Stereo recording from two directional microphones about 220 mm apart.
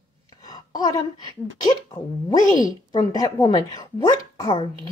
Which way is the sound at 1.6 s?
20° left (ahead or behind).